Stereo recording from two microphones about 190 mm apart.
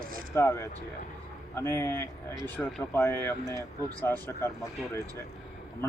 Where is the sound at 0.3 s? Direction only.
15° left (ahead or behind).